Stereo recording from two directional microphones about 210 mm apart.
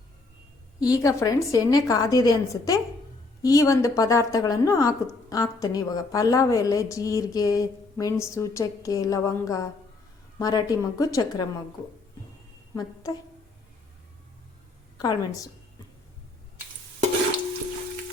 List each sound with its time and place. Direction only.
0.8 s a woman's voice: 15° left (ahead or behind)
12.7 s speech: 20° left (ahead or behind)
14.9 s a woman's voice: 20° left (ahead or behind)